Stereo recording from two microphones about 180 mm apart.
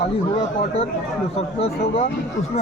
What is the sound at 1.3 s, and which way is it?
Speech, 35° left (ahead or behind).